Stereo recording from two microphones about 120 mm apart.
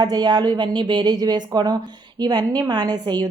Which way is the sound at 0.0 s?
35° right (ahead or behind).